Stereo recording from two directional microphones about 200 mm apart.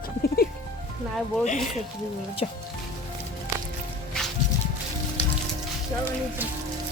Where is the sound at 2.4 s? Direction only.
30° left (ahead or behind).